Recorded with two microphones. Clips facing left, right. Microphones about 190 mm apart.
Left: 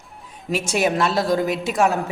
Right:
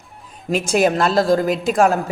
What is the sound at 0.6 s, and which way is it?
A woman's voice, 50° right (ahead or behind).